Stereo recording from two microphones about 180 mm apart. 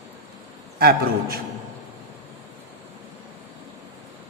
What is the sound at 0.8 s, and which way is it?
Speech, 55° right (ahead or behind).